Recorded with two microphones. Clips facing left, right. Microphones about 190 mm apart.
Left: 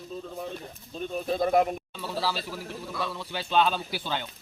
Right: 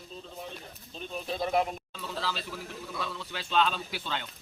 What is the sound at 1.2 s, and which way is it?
Speech, 50° left (ahead or behind).